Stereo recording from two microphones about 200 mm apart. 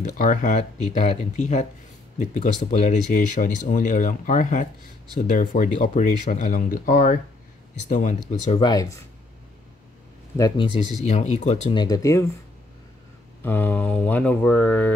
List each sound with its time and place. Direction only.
0.2 s speech: 40° left (ahead or behind)
8.5 s speech: 20° left (ahead or behind)
10.3 s speech: 15° left (ahead or behind)
11.0 s speech: 35° left (ahead or behind)
11.7 s speech: 20° left (ahead or behind)
13.4 s speech: 10° left (ahead or behind)